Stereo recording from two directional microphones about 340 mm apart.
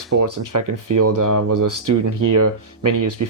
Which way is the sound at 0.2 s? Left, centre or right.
Right.